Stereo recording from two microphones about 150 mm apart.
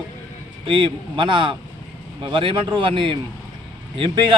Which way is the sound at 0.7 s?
35° right (ahead or behind).